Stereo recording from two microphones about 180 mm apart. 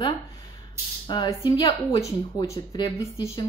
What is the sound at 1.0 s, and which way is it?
Speech, 25° left (ahead or behind).